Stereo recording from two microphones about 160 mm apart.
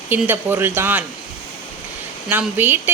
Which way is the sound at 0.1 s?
10° right (ahead or behind).